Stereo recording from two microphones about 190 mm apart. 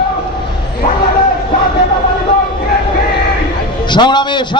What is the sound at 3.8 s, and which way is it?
Speech, 25° left (ahead or behind).